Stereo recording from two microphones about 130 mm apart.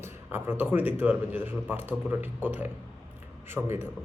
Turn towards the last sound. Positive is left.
turn(degrees=-20)  # may be behind; listen again after turning